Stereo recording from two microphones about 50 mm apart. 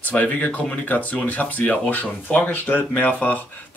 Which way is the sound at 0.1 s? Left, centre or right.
Left.